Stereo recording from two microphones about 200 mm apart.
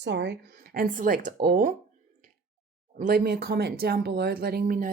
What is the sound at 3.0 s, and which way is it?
Speech, 50° right (ahead or behind).